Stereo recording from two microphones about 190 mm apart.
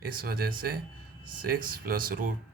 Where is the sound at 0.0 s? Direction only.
50° right (ahead or behind).